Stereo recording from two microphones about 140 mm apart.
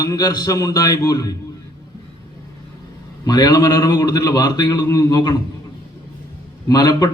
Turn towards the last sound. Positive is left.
turn(degrees=25)  # may be behind; listen again after turning